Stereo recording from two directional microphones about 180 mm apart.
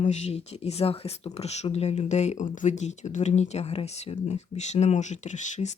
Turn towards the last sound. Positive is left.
turn(degrees=40)  # may be behind; listen again after turning